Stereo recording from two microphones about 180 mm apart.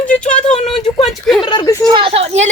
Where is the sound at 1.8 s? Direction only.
25° right (ahead or behind).